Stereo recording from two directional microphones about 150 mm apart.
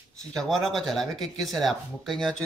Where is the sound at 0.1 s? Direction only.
5° left (ahead or behind).